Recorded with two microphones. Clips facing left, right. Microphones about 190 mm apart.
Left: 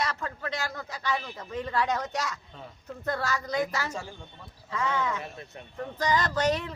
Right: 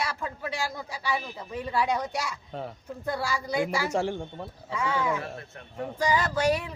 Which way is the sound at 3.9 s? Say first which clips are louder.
Right 11 dB; 80° right.